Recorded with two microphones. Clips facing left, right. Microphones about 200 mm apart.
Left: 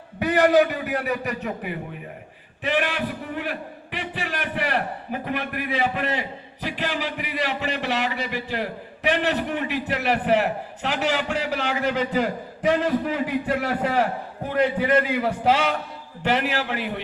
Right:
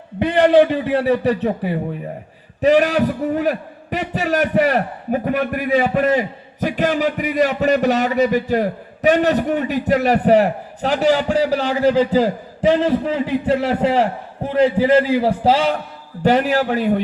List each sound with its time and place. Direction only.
0.2 s a man's voice: 25° right (ahead or behind); by 17.0 s 40° right (ahead or behind)